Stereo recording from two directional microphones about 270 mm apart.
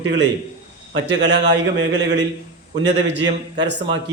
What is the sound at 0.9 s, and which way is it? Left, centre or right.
A man's voice, right.